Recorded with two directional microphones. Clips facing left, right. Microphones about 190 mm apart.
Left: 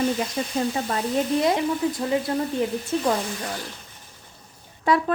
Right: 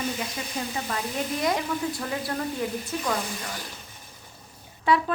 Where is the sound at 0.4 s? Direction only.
40° left (ahead or behind).